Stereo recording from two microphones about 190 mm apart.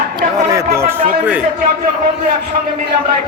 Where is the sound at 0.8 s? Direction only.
10° right (ahead or behind).